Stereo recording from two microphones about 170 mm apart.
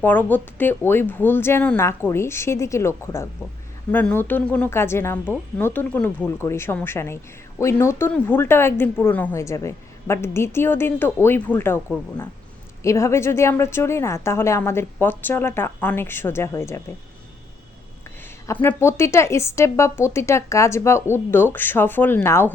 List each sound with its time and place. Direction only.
0.0 s a woman's voice: 10° left (ahead or behind)
18.4 s a woman's voice: 15° left (ahead or behind)